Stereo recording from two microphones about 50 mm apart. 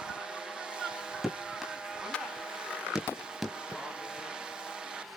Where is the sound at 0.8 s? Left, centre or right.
Centre.